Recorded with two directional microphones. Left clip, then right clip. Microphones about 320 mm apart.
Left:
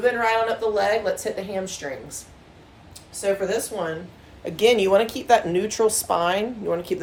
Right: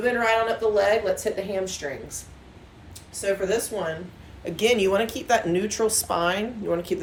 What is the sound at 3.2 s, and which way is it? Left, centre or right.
A woman's voice, centre.